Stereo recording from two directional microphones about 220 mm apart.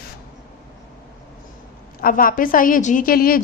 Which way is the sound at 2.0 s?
40° left (ahead or behind).